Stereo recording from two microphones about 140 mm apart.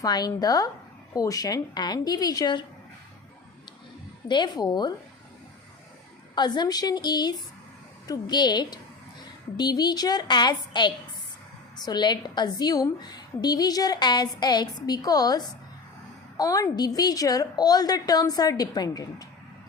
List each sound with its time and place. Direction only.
0.0 s a woman's voice: 30° left (ahead or behind)
4.3 s a woman's voice: 30° left (ahead or behind)
6.3 s a woman's voice: 30° left (ahead or behind)